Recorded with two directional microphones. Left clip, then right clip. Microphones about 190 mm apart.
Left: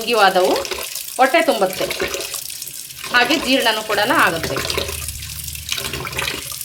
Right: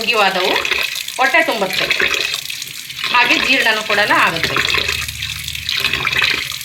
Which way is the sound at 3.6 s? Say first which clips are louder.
Right 3 dB; 45° left (ahead or behind).